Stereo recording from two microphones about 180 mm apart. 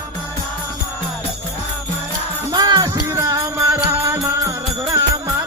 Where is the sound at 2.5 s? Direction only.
25° right (ahead or behind).